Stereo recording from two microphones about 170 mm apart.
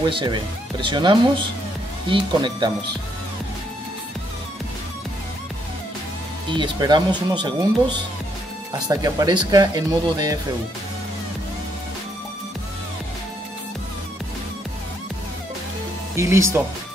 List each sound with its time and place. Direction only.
0.0 s speech: 30° right (ahead or behind)
6.5 s speech: 25° right (ahead or behind)
16.2 s speech: 15° right (ahead or behind)